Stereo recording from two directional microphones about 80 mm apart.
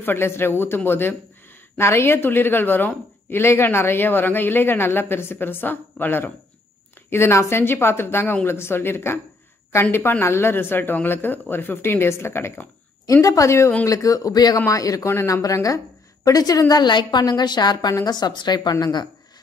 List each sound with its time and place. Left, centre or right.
0.0 s a woman's voice: left
13.0 s a woman's voice: left